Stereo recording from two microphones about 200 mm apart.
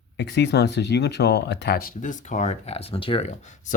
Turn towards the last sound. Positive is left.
turn(degrees=40)  # may be behind; listen again after turning